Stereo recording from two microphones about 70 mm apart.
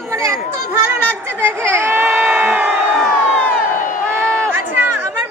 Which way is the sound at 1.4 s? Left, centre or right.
Right.